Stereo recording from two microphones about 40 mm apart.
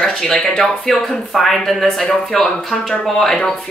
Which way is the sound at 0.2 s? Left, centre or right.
Centre.